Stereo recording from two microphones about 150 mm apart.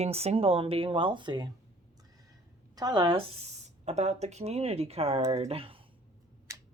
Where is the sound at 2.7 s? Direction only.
25° right (ahead or behind).